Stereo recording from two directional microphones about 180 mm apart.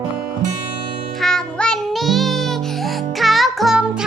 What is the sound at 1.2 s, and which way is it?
Music, 5° left (ahead or behind).